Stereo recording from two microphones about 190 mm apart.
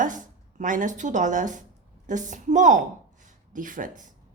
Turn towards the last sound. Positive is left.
turn(degrees=-45)  # may be behind; listen again after turning